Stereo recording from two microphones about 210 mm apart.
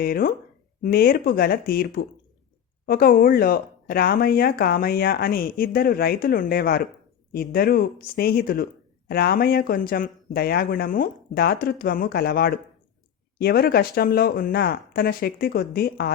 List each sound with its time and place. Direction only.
0.0 s speech: 45° left (ahead or behind)